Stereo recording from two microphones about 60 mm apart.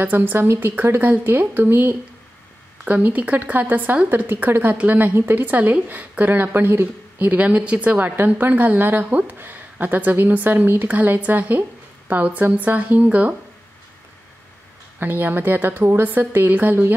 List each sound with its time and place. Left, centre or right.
0.0 s a woman's voice: right
2.8 s a woman's voice: right
15.0 s a woman's voice: right